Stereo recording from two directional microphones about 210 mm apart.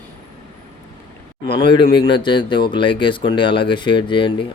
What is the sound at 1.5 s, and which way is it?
Speech, 20° left (ahead or behind).